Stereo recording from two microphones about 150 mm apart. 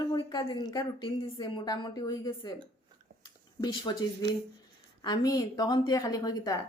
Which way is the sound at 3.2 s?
30° left (ahead or behind).